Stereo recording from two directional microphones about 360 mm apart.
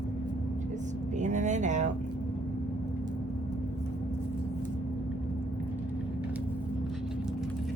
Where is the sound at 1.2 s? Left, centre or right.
Centre.